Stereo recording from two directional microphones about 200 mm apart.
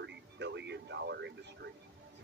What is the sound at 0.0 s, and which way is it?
Music, 60° right (ahead or behind).